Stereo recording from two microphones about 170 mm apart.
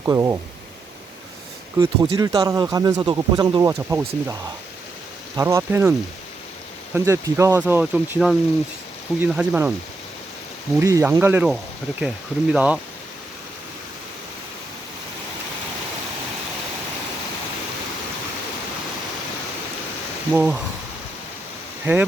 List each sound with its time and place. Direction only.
0.0 s speech: 15° right (ahead or behind)
1.8 s speech: 20° right (ahead or behind)
5.4 s speech: 15° right (ahead or behind)
6.9 s speech: 15° right (ahead or behind)
10.8 s speech: 15° right (ahead or behind)
20.3 s speech: 10° right (ahead or behind)